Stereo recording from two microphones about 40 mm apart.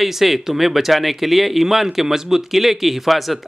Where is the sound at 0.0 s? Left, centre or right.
Centre.